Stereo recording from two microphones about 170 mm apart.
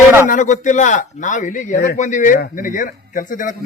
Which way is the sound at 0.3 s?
45° left (ahead or behind).